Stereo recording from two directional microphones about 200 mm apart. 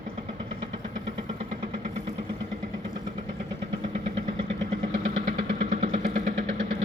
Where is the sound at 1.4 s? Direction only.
35° right (ahead or behind).